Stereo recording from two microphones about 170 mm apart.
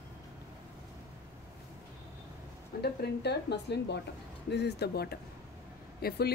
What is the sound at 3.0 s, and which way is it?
Speech, 80° left.